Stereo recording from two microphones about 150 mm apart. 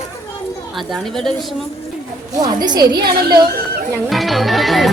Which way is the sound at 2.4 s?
25° right (ahead or behind).